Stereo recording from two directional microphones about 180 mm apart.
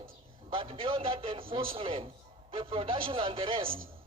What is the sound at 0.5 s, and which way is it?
A man's voice, 30° right (ahead or behind).